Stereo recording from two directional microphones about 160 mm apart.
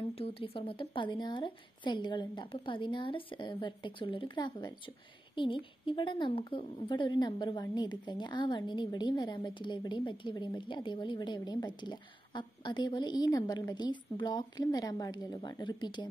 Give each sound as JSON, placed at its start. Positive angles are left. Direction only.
{"t": 0.1, "sound": "a woman's voice", "side_deg": 35}